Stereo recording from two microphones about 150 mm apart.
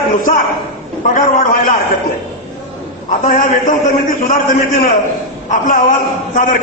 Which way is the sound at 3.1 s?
55° left (ahead or behind).